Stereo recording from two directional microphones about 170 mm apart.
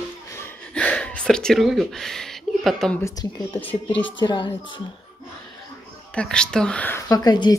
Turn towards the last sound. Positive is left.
turn(degrees=25)  # may be behind; listen again after turning